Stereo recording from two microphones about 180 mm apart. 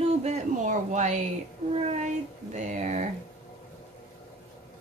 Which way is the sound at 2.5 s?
40° right (ahead or behind).